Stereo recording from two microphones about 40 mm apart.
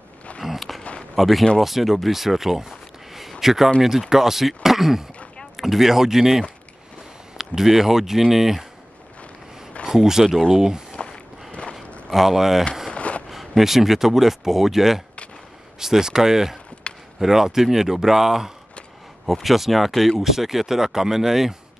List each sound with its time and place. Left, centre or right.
0.4 s a sound: centre
1.1 s speech: centre
9.8 s speech: centre
10.2 s speech: centre
10.5 s speech: centre
12.1 s speech: centre
12.9 s a sound: left
13.3 s speech: centre
16.8 s a sound: left
17.2 s speech: centre